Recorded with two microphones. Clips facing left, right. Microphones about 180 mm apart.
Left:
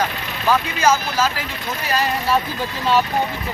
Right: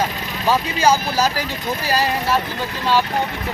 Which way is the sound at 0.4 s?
30° right (ahead or behind).